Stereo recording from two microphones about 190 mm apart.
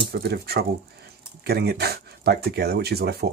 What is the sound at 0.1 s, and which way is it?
Speech, 55° right (ahead or behind).